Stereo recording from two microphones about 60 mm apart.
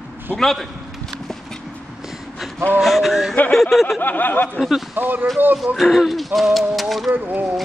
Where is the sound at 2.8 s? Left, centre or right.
Centre.